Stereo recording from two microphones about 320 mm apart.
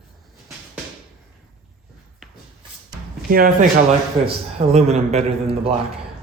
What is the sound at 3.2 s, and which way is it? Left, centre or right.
Speech, right.